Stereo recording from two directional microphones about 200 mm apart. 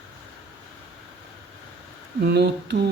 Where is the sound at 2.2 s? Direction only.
55° right (ahead or behind).